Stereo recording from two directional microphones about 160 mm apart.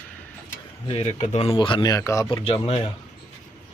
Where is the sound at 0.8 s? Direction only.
40° left (ahead or behind).